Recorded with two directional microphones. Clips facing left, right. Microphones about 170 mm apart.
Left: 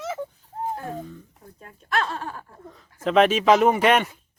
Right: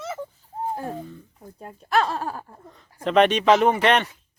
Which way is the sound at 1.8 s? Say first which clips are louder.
Right 4 dB; 35° right (ahead or behind).